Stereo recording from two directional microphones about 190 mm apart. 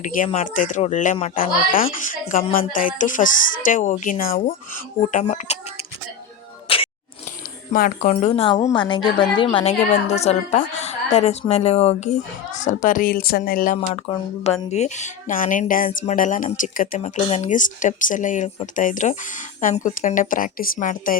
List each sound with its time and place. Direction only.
0.0 s a woman's voice: 45° left (ahead or behind)
2.5 s speech: 45° left (ahead or behind)
5.1 s a woman's voice: 35° left (ahead or behind)
6.7 s a sound: 30° left (ahead or behind)
7.7 s speech: 45° left (ahead or behind)
8.1 s a woman's voice: 30° left (ahead or behind); by 13.7 s 50° left (ahead or behind)
13.9 s a woman's voice: 30° left (ahead or behind); by 21.2 s 45° left (ahead or behind)